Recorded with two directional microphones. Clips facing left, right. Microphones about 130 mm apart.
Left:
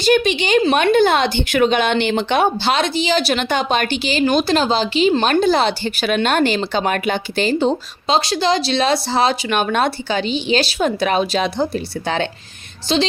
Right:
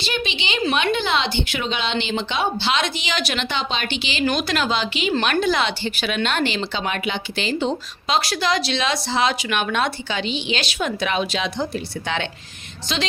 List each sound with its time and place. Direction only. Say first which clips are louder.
0.0 s speech: left 11 dB; 45° left (ahead or behind)
3.5 s speech: left 7 dB; 50° left (ahead or behind); by 13.0 s 30° left (ahead or behind)